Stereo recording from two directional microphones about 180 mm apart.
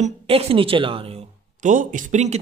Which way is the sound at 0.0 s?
35° right (ahead or behind).